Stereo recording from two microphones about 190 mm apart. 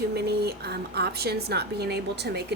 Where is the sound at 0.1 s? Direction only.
60° right (ahead or behind).